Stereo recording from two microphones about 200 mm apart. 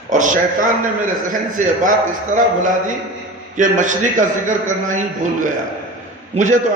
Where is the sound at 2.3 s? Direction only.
40° right (ahead or behind).